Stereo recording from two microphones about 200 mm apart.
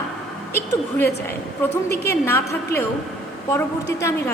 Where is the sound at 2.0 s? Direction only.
15° left (ahead or behind).